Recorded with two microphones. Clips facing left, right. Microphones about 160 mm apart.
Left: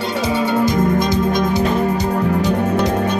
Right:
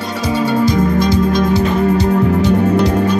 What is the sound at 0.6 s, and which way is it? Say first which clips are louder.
Music: right 2 dB; 20° left (ahead or behind).